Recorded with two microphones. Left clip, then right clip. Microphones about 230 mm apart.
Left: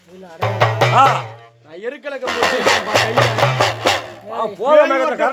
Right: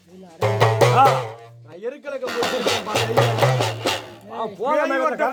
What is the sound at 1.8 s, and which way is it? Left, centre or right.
Speech, right.